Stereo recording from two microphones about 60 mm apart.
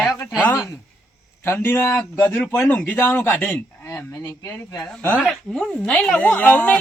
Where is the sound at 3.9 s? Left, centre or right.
Left.